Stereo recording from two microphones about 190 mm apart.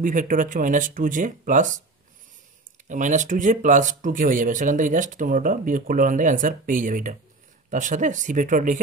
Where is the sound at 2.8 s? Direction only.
40° right (ahead or behind).